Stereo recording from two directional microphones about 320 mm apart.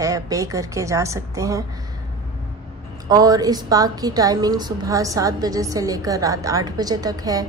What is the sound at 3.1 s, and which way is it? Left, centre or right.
A woman's voice, centre.